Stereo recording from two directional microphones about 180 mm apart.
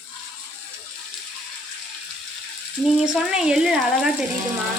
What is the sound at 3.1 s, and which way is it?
Speech, 5° right (ahead or behind).